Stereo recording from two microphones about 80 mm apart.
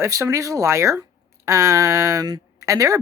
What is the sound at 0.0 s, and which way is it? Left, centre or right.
Speech, right.